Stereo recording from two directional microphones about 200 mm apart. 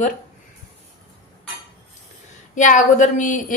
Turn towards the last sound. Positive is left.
turn(degrees=40)  # may be behind; listen again after turning